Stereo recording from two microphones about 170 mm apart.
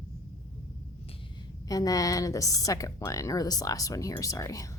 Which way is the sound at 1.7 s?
20° left (ahead or behind).